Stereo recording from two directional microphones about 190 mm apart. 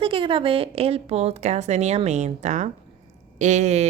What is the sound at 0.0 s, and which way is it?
Speech, 25° right (ahead or behind).